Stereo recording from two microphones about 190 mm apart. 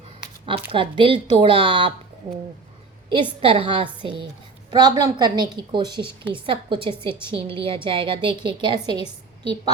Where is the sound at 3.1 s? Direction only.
25° right (ahead or behind).